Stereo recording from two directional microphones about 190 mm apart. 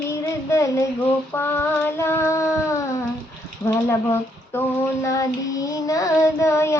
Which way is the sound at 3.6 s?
10° left (ahead or behind).